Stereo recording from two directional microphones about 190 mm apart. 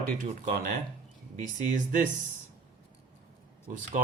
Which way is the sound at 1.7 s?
40° right (ahead or behind).